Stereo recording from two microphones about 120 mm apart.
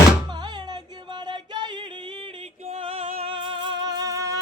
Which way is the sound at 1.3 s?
40° right (ahead or behind).